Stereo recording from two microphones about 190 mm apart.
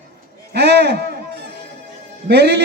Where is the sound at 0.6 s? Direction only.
60° right (ahead or behind).